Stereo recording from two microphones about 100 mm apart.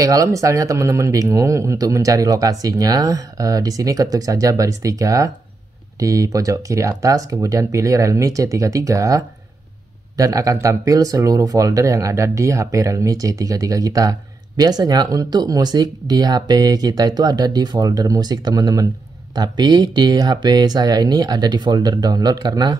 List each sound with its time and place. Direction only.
0.0 s speech: 35° right (ahead or behind)